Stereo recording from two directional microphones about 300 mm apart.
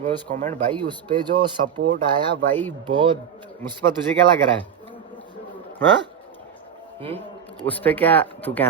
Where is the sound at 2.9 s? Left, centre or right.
Centre.